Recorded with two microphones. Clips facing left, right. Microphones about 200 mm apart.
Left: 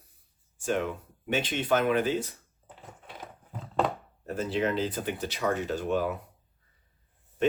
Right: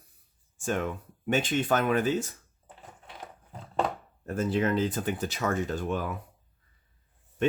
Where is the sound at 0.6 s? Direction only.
50° right (ahead or behind).